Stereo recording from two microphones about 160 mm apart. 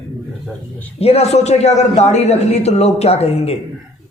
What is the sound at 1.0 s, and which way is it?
A man's voice, 40° left (ahead or behind).